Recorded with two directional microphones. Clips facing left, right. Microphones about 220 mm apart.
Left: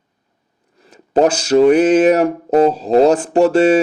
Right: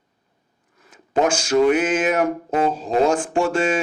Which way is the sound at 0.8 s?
35° left (ahead or behind).